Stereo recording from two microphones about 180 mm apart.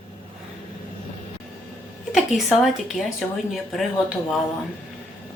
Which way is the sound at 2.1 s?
Centre (ahead or behind).